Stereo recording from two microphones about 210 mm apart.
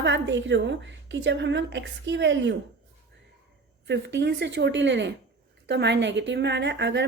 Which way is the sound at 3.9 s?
55° right (ahead or behind).